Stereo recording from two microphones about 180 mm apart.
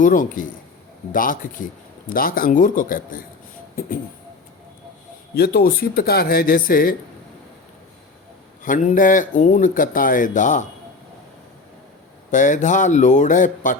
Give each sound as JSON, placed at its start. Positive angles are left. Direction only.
{"t": 0.0, "sound": "speech", "side_deg": 45}
{"t": 5.3, "sound": "speech", "side_deg": 60}
{"t": 8.6, "sound": "speech", "side_deg": 45}
{"t": 12.3, "sound": "speech", "side_deg": 45}